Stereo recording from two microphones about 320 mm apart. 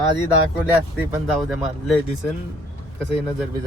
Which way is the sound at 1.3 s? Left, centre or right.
Centre.